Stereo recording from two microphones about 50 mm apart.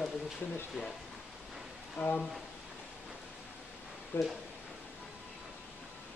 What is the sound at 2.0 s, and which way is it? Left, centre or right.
Speech, left.